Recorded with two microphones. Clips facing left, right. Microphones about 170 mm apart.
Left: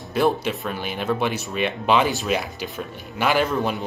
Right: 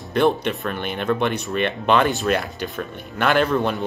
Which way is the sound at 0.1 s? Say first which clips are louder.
Right 2 dB; 5° left (ahead or behind).